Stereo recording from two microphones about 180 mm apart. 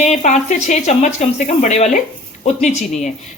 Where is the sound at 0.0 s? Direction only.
40° left (ahead or behind).